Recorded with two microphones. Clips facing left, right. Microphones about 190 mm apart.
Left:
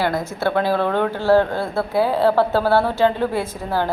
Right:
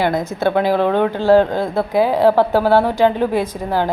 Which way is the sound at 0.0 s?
20° right (ahead or behind).